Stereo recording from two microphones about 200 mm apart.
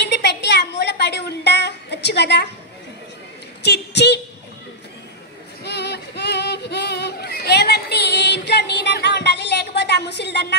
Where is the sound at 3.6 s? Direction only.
55° left (ahead or behind).